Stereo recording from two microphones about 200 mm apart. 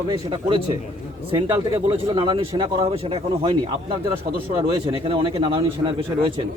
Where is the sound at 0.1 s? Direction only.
25° right (ahead or behind).